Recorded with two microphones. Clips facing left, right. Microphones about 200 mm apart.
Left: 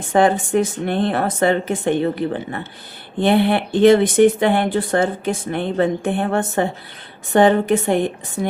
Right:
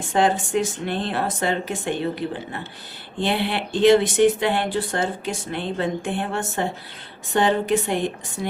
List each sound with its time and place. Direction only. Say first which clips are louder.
0.1 s speech: left 5 dB; 60° left (ahead or behind)